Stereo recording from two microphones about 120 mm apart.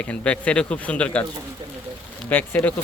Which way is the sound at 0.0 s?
10° left (ahead or behind).